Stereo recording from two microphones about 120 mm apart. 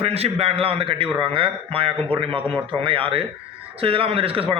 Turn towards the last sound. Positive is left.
turn(degrees=-50)  # may be behind; listen again after turning